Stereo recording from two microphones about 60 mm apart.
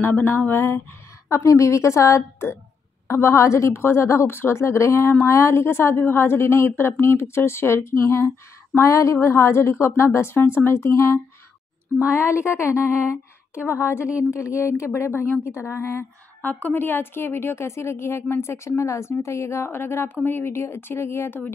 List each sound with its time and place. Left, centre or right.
0.0 s a woman's voice: left
1.3 s a woman's voice: left
16.4 s a woman's voice: left